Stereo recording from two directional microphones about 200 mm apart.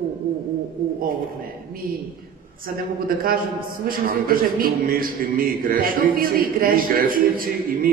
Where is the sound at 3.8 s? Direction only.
45° right (ahead or behind).